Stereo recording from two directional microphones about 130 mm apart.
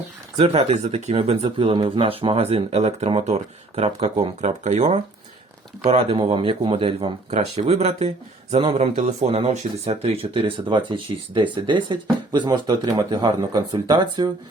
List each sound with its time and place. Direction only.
0.3 s speech: 60° right (ahead or behind)
5.9 s speech: 45° right (ahead or behind)
7.3 s speech: 60° right (ahead or behind); by 14.3 s 30° right (ahead or behind)